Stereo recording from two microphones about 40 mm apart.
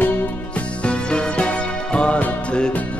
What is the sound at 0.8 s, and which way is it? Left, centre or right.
Music, left.